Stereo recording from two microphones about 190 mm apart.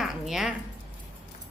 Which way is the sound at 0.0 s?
Centre (ahead or behind).